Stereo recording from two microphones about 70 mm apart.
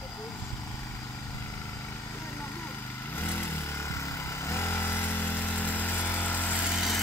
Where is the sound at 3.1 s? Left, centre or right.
Left.